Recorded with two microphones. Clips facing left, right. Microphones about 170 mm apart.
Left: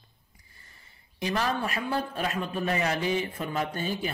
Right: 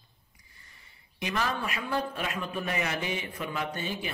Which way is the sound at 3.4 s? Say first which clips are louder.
Left 3 dB; 45° left (ahead or behind).